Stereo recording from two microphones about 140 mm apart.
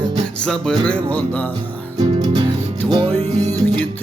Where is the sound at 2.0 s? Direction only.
30° right (ahead or behind).